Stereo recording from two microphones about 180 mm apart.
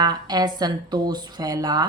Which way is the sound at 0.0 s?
20° right (ahead or behind).